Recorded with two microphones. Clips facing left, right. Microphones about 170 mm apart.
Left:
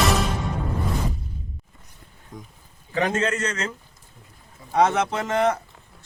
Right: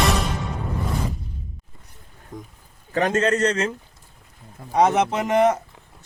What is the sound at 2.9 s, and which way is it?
Speech, 45° right (ahead or behind).